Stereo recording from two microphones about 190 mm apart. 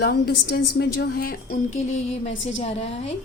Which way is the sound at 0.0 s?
55° left (ahead or behind).